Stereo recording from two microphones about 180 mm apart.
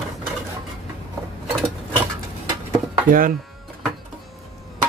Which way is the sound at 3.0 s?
50° right (ahead or behind).